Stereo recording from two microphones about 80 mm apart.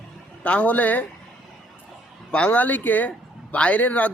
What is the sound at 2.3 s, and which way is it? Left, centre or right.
Speech, centre.